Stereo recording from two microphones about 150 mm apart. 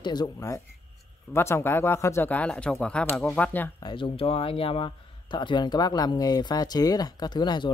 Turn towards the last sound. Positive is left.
turn(degrees=30)  # may be behind; listen again after turning